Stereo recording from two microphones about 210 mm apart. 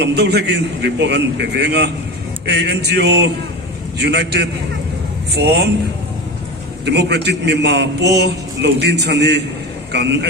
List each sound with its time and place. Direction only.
0.0 s a man's voice: 55° right (ahead or behind)
6.8 s a man's voice: 55° right (ahead or behind)